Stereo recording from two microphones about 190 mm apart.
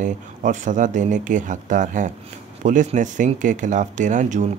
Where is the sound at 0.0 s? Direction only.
40° right (ahead or behind).